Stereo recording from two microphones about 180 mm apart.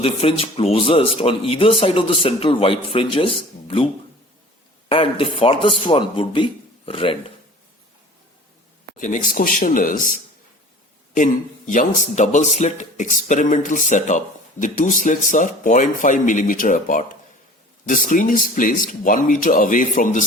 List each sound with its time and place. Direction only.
0.0 s a man's voice: 30° left (ahead or behind)
4.9 s speech: 30° left (ahead or behind)
9.0 s a man's voice: 45° left (ahead or behind)